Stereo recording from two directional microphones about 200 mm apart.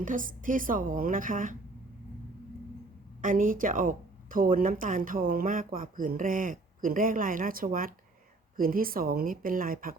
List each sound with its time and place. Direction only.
0.0 s a woman's voice: 40° right (ahead or behind)
3.2 s speech: 40° right (ahead or behind)